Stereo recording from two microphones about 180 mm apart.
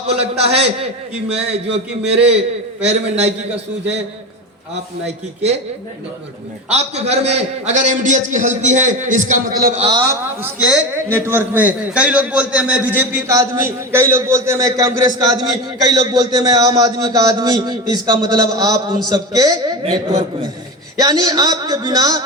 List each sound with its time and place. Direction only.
0.1 s a man's voice: 35° right (ahead or behind)
6.7 s a man's voice: 35° right (ahead or behind)
9.9 s a man's voice: 15° right (ahead or behind)